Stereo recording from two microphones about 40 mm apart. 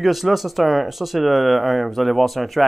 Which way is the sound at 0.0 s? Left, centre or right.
Centre.